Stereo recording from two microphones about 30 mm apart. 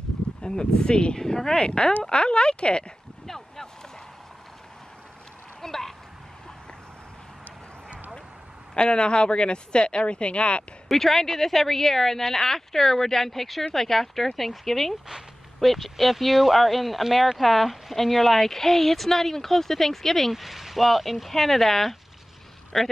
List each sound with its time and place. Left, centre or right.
0.4 s speech: left
1.2 s speech: centre
2.0 s speech: left
3.3 s boat: centre
5.6 s a sound: centre
8.7 s speech: left
10.9 s speech: centre
20.3 s speech: centre